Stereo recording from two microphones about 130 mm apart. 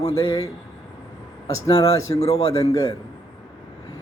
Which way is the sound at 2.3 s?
30° left (ahead or behind).